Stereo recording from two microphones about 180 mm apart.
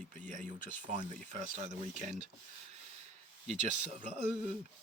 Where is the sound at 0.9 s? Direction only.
35° right (ahead or behind).